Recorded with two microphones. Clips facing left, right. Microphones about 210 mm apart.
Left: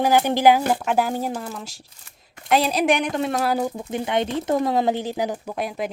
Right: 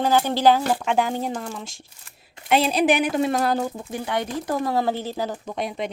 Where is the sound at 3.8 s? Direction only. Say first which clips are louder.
Left 3 dB; 20° left (ahead or behind).